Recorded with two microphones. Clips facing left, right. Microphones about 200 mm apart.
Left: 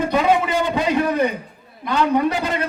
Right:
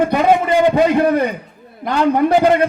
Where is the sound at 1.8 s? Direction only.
55° right (ahead or behind).